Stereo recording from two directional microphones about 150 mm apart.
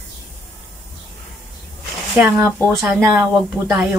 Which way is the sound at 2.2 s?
15° right (ahead or behind).